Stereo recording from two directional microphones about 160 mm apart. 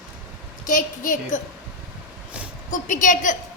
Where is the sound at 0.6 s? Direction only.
55° left (ahead or behind).